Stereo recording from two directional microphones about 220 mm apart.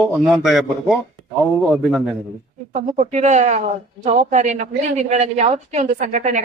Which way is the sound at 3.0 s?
30° right (ahead or behind).